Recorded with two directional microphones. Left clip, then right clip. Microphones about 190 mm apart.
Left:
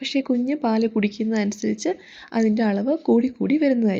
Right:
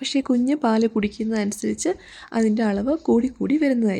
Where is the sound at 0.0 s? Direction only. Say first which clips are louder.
Right 1 dB; 25° right (ahead or behind).